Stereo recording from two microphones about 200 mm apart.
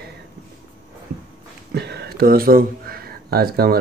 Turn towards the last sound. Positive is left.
turn(degrees=-50)  # may be behind; listen again after turning